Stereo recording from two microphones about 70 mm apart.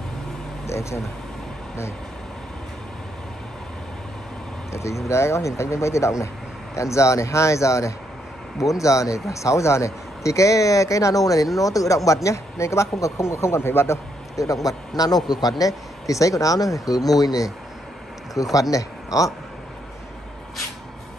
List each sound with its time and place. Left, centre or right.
0.7 s speech: left
4.7 s speech: left
14.5 s speech: left
15.2 s speech: left